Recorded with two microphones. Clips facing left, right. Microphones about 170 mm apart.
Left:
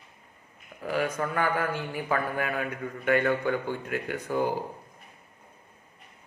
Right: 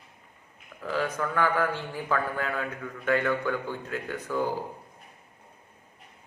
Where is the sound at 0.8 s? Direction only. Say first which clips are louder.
Left 1 dB; 20° left (ahead or behind).